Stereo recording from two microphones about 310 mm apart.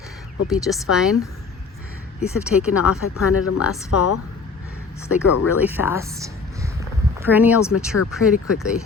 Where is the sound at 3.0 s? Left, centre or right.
Left.